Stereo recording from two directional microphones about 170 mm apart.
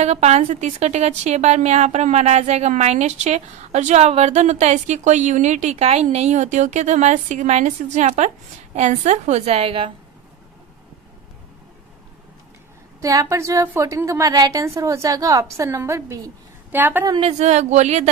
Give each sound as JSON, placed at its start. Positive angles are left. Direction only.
{"t": 0.0, "sound": "a woman's voice", "side_deg": -40}
{"t": 13.0, "sound": "a woman's voice", "side_deg": -20}
{"t": 17.1, "sound": "a woman's voice", "side_deg": -35}